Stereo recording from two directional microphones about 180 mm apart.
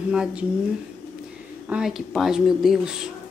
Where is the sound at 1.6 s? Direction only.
5° right (ahead or behind).